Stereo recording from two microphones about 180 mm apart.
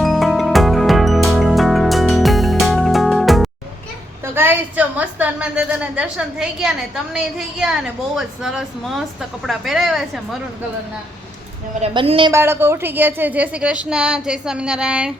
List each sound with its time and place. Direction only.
0.0 s music: centre (ahead or behind)
4.4 s a woman's voice: 10° right (ahead or behind)
11.8 s a woman's voice: 30° right (ahead or behind)
12.3 s a woman's voice: 15° right (ahead or behind)